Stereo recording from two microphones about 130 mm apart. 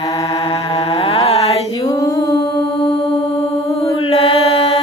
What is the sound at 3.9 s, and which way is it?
Mantra, 50° left (ahead or behind).